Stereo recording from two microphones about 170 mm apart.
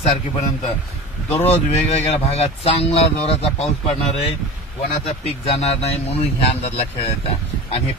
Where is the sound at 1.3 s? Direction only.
40° left (ahead or behind).